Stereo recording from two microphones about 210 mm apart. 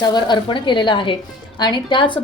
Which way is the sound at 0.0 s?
20° left (ahead or behind).